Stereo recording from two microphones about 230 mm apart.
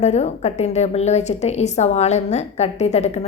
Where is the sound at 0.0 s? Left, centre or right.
Left.